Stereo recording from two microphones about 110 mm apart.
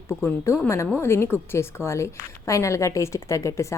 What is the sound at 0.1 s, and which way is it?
A woman's voice, 25° left (ahead or behind).